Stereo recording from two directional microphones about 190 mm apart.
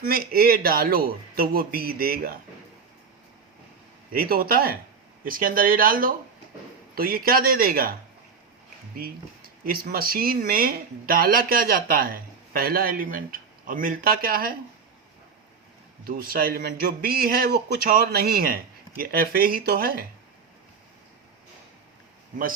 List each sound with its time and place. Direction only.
0.0 s speech: 50° right (ahead or behind)
4.1 s speech: 50° right (ahead or behind)
9.0 s a sound: 50° right (ahead or behind)
9.9 s speech: 50° right (ahead or behind)
16.0 s speech: 50° right (ahead or behind)